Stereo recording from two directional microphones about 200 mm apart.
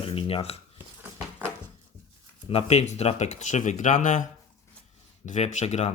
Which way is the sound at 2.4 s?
30° left (ahead or behind).